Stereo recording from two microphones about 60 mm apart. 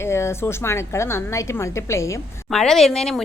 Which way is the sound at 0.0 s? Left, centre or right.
Left.